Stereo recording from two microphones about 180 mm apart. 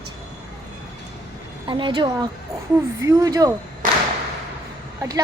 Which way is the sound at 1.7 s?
25° right (ahead or behind).